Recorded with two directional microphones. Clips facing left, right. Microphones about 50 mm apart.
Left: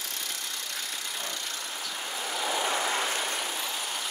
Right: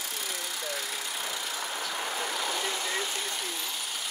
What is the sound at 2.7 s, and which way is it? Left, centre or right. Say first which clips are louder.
Vehicle: left 4 dB; left.